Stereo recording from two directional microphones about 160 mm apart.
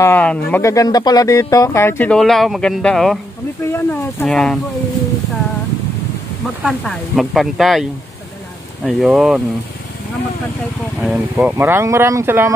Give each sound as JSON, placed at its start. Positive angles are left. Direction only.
{"t": 0.0, "sound": "speech", "side_deg": 10}
{"t": 3.6, "sound": "speech", "side_deg": 15}
{"t": 4.3, "sound": "speech", "side_deg": 5}
{"t": 6.6, "sound": "speech", "side_deg": 5}
{"t": 8.8, "sound": "speech", "side_deg": 0}
{"t": 11.0, "sound": "speech", "side_deg": 0}
{"t": 11.5, "sound": "speech", "side_deg": -15}